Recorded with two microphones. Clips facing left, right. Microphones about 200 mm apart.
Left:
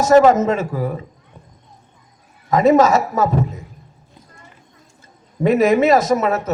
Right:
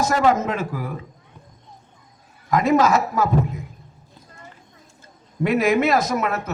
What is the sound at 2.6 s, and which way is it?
Speech, 45° left (ahead or behind).